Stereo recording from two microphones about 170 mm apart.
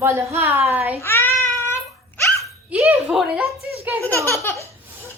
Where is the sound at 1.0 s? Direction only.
15° left (ahead or behind).